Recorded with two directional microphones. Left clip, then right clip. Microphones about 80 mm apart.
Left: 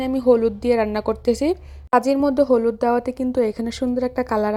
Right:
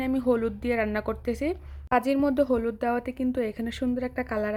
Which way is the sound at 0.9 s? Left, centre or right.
Left.